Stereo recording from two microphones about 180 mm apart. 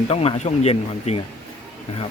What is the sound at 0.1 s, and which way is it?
Speech, 35° left (ahead or behind).